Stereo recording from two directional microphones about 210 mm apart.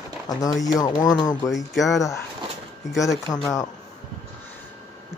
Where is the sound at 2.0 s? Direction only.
15° left (ahead or behind).